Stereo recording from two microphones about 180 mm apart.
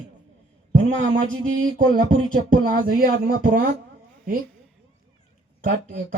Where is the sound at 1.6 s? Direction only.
50° right (ahead or behind).